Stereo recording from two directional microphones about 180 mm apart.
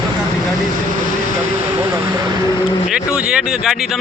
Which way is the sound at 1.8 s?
20° right (ahead or behind).